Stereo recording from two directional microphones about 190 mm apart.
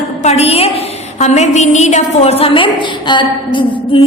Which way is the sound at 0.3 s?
35° left (ahead or behind).